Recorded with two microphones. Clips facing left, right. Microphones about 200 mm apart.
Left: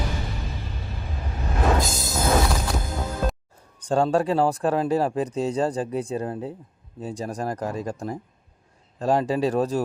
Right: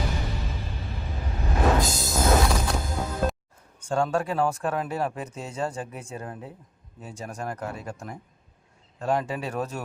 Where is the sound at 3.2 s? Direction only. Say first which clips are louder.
Right 1 dB; centre (ahead or behind).